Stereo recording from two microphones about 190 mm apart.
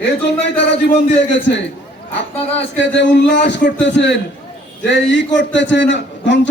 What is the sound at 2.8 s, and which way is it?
A man's voice, 70° left (ahead or behind).